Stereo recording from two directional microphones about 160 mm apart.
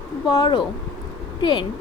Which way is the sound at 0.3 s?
25° left (ahead or behind).